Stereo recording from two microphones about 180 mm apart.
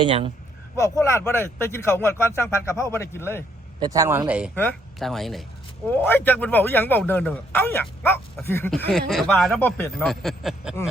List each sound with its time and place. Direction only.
0.0 s a man's voice: 30° right (ahead or behind)
0.8 s speech: 15° left (ahead or behind)
3.8 s speech: 20° right (ahead or behind)
4.5 s speech: 5° left (ahead or behind)
8.9 s speech: centre (ahead or behind)